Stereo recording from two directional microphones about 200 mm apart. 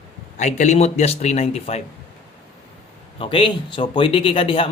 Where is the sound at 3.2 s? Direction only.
25° left (ahead or behind).